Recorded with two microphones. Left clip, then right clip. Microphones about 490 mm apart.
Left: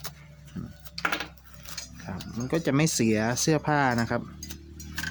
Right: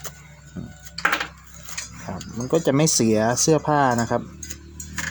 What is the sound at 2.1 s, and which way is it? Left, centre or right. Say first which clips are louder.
Speech: right 7 dB; left.